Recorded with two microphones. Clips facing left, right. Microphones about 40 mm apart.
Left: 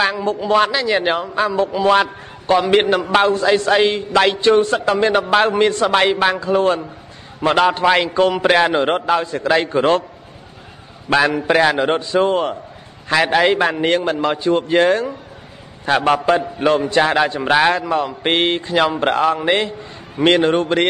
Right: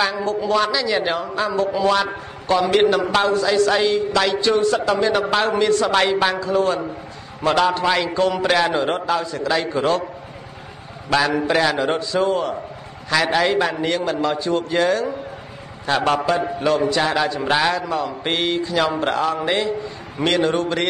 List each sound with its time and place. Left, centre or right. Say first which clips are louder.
0.0 s a man's voice: left 2 dB; left
6.4 s a man's voice: left 3 dB; left
11.1 s a man's voice: left 3 dB; left
16.0 s a man's voice: left 3 dB; left
16.3 s a man's voice: left 2 dB; left